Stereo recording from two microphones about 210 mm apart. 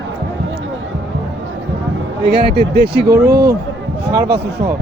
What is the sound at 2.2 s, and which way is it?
Speech, 50° right (ahead or behind).